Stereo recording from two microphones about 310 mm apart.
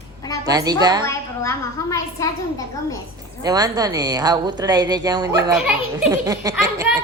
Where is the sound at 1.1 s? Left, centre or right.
Centre.